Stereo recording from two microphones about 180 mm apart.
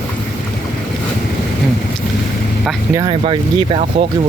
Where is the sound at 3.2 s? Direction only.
30° right (ahead or behind).